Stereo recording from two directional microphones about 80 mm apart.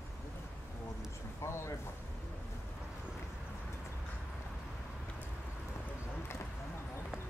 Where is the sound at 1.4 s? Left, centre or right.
Left.